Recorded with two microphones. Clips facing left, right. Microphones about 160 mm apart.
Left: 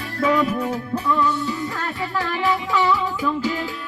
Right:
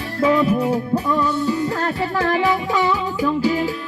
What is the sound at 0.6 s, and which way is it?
Music, 40° right (ahead or behind).